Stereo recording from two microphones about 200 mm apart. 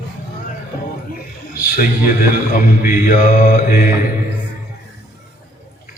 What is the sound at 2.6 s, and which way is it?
A man's voice, 45° left (ahead or behind).